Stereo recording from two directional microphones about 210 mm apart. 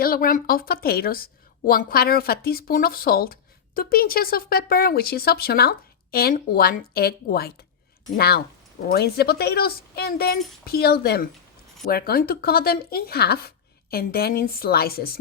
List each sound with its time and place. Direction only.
0.0 s speech: 45° left (ahead or behind)